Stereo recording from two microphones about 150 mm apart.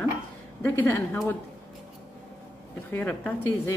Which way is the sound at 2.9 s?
10° left (ahead or behind).